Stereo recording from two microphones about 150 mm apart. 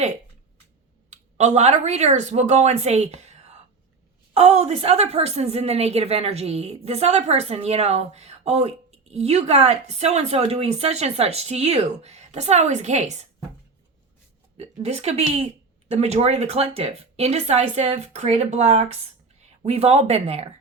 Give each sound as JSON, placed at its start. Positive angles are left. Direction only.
{"t": 1.1, "sound": "a woman's voice", "side_deg": -50}
{"t": 14.6, "sound": "a woman's voice", "side_deg": -40}